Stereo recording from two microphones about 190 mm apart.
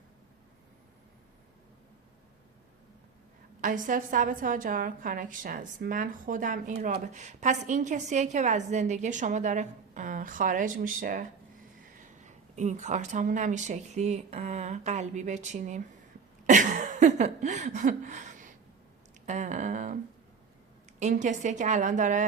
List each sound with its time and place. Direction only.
3.6 s a woman's voice: 45° right (ahead or behind)
16.5 s a sound: 40° right (ahead or behind)
21.0 s a woman's voice: 40° right (ahead or behind)